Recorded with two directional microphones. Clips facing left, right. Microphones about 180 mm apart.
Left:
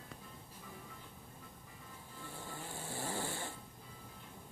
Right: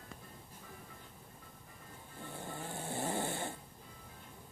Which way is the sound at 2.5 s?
20° right (ahead or behind).